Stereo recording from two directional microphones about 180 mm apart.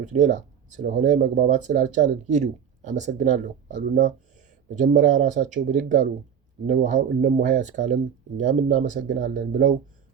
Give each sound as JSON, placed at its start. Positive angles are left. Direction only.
{"t": 0.0, "sound": "speech", "side_deg": -40}